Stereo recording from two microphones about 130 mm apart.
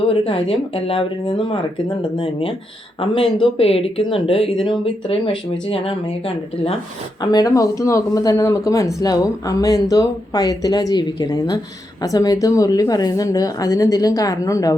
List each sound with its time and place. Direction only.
0.1 s speech: 45° left (ahead or behind)
7.2 s speech: 30° left (ahead or behind)